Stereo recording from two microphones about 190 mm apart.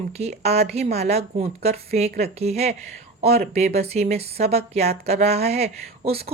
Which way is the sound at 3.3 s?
55° right (ahead or behind).